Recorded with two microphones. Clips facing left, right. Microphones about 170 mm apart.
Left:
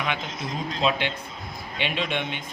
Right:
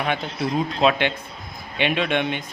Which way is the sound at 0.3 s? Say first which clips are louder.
Right 7 dB; 65° right (ahead or behind).